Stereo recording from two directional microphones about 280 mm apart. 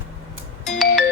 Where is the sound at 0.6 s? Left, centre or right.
Centre.